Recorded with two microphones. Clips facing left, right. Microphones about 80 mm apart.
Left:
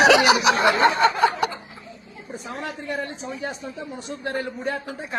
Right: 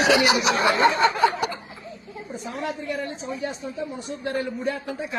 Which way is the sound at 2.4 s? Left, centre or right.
Left.